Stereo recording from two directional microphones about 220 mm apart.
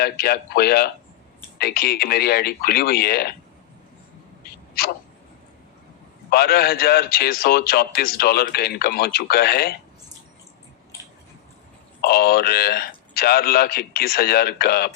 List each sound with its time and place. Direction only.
0.0 s a man's voice: 45° left (ahead or behind)
6.3 s a man's voice: 45° left (ahead or behind)
12.0 s a man's voice: 45° left (ahead or behind)